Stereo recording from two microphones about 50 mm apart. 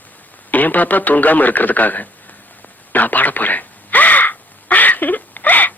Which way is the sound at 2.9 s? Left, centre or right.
Left.